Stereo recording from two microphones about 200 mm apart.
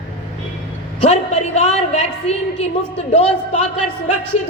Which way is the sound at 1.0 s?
30° left (ahead or behind).